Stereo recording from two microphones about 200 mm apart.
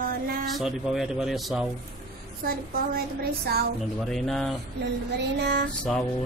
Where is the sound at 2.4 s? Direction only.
50° right (ahead or behind).